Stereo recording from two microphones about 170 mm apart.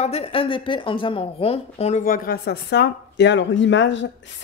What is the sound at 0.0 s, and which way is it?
A woman's voice, 35° left (ahead or behind).